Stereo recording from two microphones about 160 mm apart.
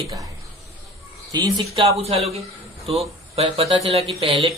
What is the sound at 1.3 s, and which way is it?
Speech, 25° right (ahead or behind).